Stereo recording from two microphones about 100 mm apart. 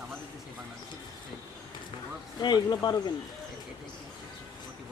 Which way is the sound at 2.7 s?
45° left (ahead or behind).